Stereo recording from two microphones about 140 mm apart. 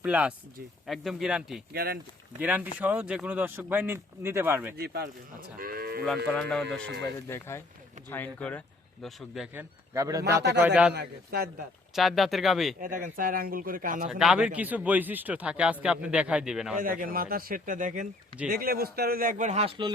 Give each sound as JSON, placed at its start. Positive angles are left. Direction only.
{"t": 0.0, "sound": "speech", "side_deg": -10}
{"t": 1.7, "sound": "speech", "side_deg": -90}
{"t": 2.4, "sound": "speech", "side_deg": -10}
{"t": 5.5, "sound": "sheep", "side_deg": -90}
{"t": 6.1, "sound": "speech", "side_deg": 5}
{"t": 7.3, "sound": "speech", "side_deg": 20}
{"t": 9.6, "sound": "speech", "side_deg": -20}
{"t": 11.9, "sound": "speech", "side_deg": 0}
{"t": 12.8, "sound": "speech", "side_deg": -75}
{"t": 14.1, "sound": "speech", "side_deg": -5}
{"t": 16.8, "sound": "speech", "side_deg": -85}
{"t": 18.4, "sound": "speech", "side_deg": -90}